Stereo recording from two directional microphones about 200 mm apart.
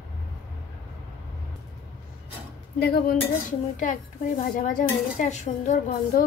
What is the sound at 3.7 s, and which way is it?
A woman's voice, 40° left (ahead or behind).